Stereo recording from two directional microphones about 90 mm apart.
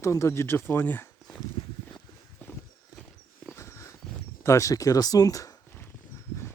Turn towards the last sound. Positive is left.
turn(degrees=40)  # may be behind; listen again after turning